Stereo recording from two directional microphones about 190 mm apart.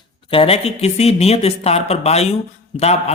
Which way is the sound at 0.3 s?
30° left (ahead or behind).